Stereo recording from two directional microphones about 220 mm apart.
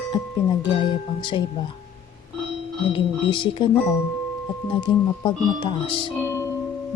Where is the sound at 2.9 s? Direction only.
20° left (ahead or behind).